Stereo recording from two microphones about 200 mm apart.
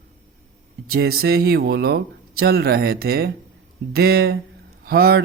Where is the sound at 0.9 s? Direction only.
50° right (ahead or behind).